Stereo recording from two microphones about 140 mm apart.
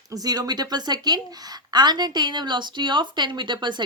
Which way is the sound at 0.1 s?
25° right (ahead or behind).